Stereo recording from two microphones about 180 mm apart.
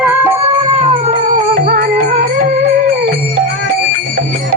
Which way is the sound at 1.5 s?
50° right (ahead or behind).